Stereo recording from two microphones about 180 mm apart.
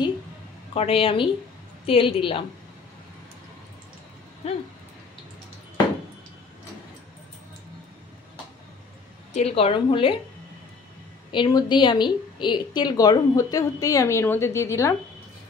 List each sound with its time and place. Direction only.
0.7 s a woman's voice: 30° left (ahead or behind)
4.4 s a woman's voice: 35° left (ahead or behind)
9.3 s a woman's voice: 35° left (ahead or behind)
11.3 s a woman's voice: 25° left (ahead or behind)